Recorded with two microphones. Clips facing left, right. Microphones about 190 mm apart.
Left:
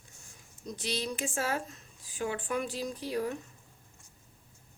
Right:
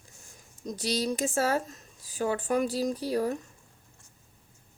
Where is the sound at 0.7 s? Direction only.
40° right (ahead or behind).